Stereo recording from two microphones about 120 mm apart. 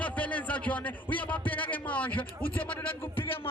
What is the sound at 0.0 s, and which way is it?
A man's voice, 10° left (ahead or behind).